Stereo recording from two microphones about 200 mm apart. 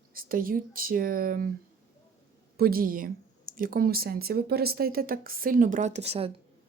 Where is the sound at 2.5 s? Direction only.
50° right (ahead or behind).